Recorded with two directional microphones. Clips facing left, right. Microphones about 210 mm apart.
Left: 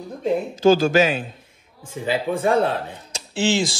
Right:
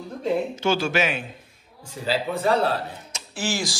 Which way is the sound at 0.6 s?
35° left (ahead or behind).